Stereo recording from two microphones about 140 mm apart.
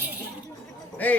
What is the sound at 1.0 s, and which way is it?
Speech, 10° left (ahead or behind).